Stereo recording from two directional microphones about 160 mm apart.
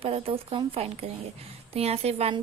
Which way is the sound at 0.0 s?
35° right (ahead or behind).